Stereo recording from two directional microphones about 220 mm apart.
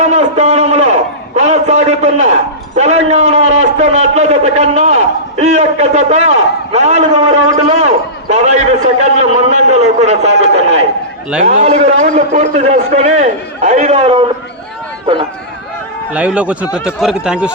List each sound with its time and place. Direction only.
0.0 s a man's voice: 30° right (ahead or behind)
16.1 s speech: 5° right (ahead or behind)